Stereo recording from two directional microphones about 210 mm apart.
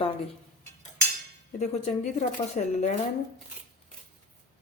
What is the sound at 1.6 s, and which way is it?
Speech, 35° left (ahead or behind).